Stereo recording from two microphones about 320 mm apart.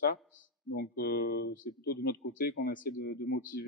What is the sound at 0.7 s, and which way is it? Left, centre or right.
A man's voice, left.